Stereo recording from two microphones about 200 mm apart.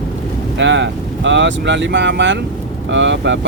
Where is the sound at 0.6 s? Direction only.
65° right (ahead or behind).